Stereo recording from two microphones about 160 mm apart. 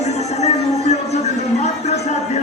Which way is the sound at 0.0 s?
45° left (ahead or behind).